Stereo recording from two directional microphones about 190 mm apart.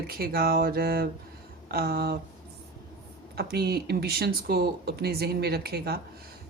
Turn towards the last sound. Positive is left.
turn(degrees=-55)  # may be behind; listen again after turning